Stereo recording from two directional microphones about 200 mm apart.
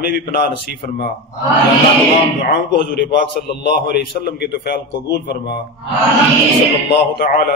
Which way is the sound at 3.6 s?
55° left (ahead or behind).